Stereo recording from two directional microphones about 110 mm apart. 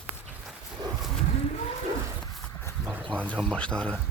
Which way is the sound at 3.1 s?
10° left (ahead or behind).